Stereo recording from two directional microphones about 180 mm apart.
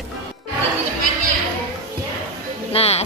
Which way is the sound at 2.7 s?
35° left (ahead or behind).